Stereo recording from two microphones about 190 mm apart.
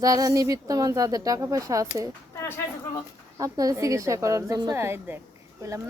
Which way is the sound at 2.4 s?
10° left (ahead or behind).